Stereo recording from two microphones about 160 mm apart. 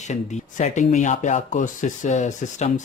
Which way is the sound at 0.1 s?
45° left (ahead or behind).